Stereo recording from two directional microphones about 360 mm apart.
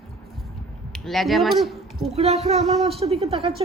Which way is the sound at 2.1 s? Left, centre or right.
Centre.